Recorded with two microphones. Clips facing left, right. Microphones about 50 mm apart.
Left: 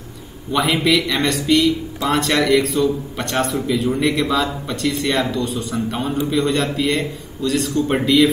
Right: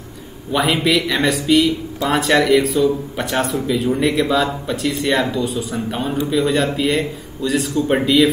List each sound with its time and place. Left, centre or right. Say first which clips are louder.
0.5 s speech: even; centre